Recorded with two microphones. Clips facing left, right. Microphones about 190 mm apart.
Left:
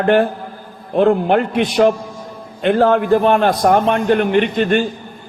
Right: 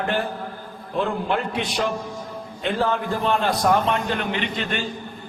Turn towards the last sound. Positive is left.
turn(degrees=50)  # may be behind; listen again after turning